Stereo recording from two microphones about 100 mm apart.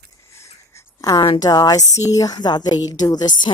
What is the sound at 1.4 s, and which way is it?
Speech, 40° left (ahead or behind).